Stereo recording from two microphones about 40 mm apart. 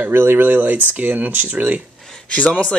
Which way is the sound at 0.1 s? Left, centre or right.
Right.